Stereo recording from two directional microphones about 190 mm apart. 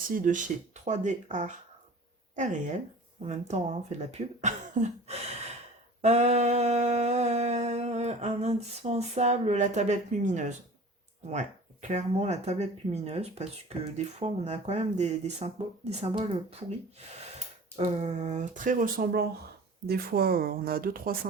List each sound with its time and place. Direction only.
0.1 s speech: 45° right (ahead or behind)
6.0 s a sound: 35° right (ahead or behind)
11.3 s speech: 40° right (ahead or behind)
17.7 s speech: 35° right (ahead or behind)